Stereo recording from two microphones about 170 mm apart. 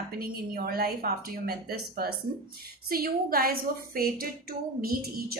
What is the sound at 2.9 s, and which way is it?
A woman's voice, 60° right (ahead or behind).